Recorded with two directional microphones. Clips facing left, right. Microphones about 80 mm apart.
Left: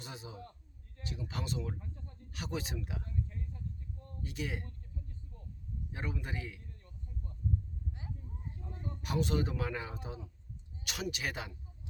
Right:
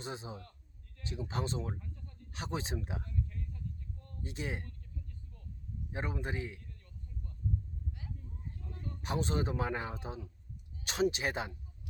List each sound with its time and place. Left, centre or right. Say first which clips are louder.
0.0 s speech: right 4 dB; right
1.8 s speech: left 1 dB; left
2.3 s speech: right 1 dB; right
3.0 s a sound: even; left
4.2 s speech: even; right
4.6 s a sound: left 1 dB; left
5.9 s speech: right 3 dB; right
6.7 s a sound: left 1 dB; left
9.0 s speech: left 1 dB; right